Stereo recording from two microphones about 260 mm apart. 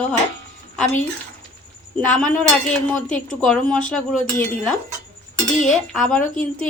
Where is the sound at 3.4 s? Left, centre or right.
Centre.